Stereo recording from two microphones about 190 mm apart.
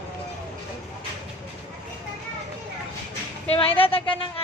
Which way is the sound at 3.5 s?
30° left (ahead or behind).